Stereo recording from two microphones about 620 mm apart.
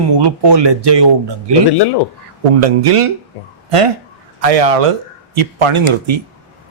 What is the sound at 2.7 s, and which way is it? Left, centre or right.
Speech, right.